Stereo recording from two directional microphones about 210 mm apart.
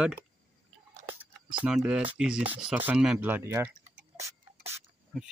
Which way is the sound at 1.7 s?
5° right (ahead or behind).